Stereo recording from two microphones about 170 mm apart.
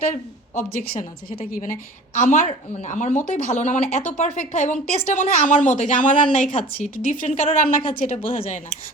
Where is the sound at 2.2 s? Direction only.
45° left (ahead or behind).